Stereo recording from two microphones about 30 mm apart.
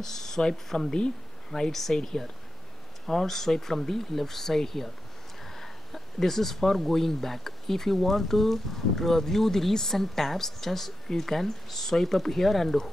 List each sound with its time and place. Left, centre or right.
0.0 s speech: centre